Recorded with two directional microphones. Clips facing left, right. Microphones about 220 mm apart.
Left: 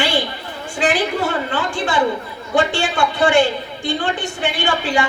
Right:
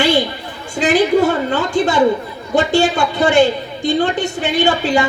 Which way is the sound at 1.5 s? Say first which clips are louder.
Right 5 dB; 40° right (ahead or behind).